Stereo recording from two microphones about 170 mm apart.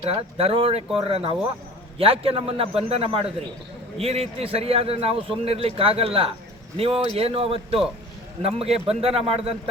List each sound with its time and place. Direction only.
0.1 s a man's voice: 35° right (ahead or behind)